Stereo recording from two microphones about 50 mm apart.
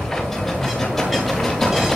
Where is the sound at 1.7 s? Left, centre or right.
Centre.